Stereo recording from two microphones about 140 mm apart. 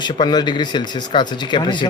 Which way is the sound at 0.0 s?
30° left (ahead or behind).